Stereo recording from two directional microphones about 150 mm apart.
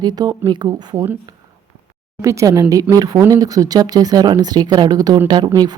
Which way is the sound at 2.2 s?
20° right (ahead or behind).